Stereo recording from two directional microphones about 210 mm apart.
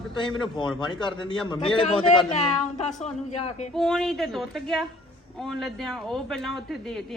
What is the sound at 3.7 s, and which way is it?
Speech, centre (ahead or behind).